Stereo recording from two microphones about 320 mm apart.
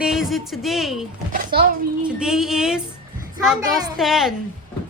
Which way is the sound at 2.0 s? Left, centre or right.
Centre.